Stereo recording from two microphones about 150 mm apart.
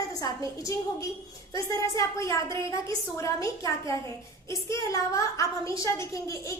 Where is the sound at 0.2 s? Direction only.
20° left (ahead or behind).